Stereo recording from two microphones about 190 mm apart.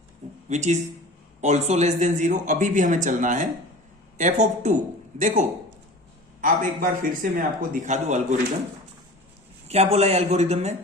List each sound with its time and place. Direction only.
0.4 s speech: 40° right (ahead or behind)
9.6 s speech: 35° right (ahead or behind)